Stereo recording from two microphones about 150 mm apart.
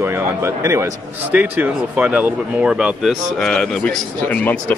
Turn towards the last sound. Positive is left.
turn(degrees=10)  # may be behind; listen again after turning